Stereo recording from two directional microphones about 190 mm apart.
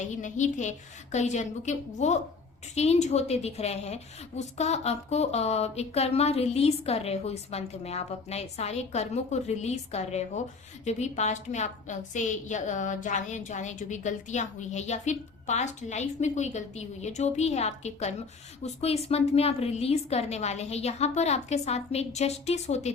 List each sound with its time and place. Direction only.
0.0 s a woman's voice: 40° left (ahead or behind)